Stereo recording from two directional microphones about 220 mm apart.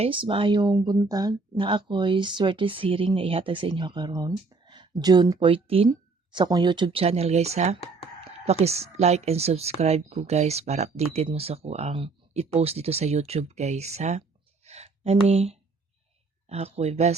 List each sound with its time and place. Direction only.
0.0 s speech: 25° right (ahead or behind)